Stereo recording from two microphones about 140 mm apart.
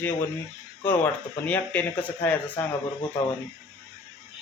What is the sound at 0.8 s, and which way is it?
A man's voice, 10° left (ahead or behind).